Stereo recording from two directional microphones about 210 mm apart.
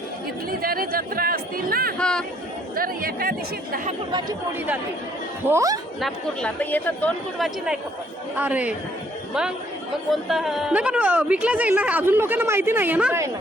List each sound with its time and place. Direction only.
0.6 s chatter: 45° right (ahead or behind)
2.0 s a sound: 5° left (ahead or behind)
2.7 s speech: 45° right (ahead or behind)
5.5 s a woman's voice: 15° right (ahead or behind)
6.0 s a woman's voice: centre (ahead or behind)
10.1 s a woman's voice: centre (ahead or behind)